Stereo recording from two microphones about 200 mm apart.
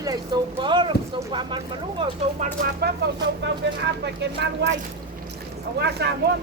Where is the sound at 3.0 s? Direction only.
55° right (ahead or behind).